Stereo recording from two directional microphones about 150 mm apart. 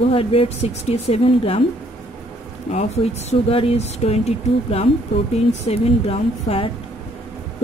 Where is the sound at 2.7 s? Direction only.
45° left (ahead or behind).